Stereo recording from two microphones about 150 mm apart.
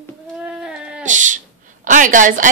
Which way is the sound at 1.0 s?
55° right (ahead or behind).